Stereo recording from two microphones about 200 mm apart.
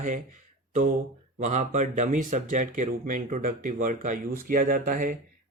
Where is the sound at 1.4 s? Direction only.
35° right (ahead or behind).